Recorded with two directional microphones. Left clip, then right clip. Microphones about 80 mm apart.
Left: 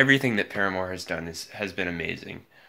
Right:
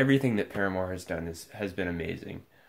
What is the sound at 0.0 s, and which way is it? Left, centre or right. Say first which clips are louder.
Speech: left 5 dB; centre.